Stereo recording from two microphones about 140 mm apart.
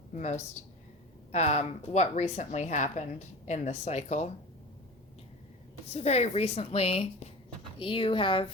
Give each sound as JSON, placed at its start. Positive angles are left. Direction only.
{"t": 0.1, "sound": "a woman's voice", "side_deg": 55}
{"t": 5.9, "sound": "a woman's voice", "side_deg": 50}